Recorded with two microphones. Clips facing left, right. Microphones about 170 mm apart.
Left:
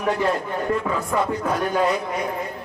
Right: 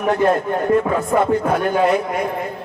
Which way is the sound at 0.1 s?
50° right (ahead or behind).